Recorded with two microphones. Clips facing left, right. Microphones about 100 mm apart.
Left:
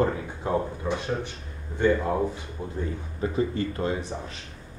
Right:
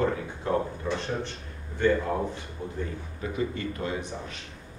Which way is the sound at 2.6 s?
10° left (ahead or behind).